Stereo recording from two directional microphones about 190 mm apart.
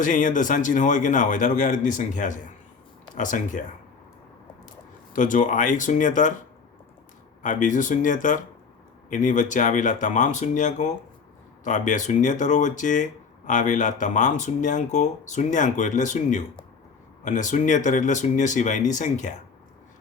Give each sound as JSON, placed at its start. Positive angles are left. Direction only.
{"t": 0.0, "sound": "speech", "side_deg": 40}
{"t": 5.1, "sound": "speech", "side_deg": 45}
{"t": 7.4, "sound": "speech", "side_deg": 45}